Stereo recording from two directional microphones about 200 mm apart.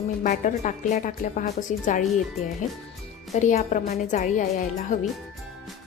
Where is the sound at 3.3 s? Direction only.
35° left (ahead or behind).